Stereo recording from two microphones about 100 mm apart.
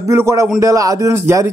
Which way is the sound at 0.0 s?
30° right (ahead or behind).